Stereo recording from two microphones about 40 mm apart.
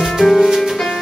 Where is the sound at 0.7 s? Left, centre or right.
Centre.